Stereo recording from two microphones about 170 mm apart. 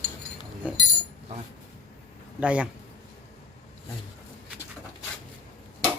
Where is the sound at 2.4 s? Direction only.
5° right (ahead or behind).